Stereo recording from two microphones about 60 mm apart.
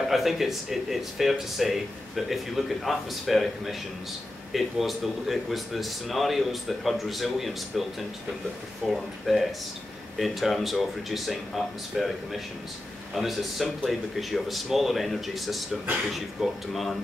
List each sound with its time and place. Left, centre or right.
0.1 s speech: centre
8.8 s speech: centre